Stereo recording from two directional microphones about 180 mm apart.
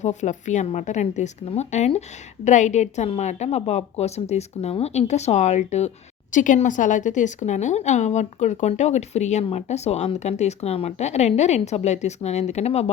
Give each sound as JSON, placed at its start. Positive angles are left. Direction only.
{"t": 0.0, "sound": "a woman's voice", "side_deg": 40}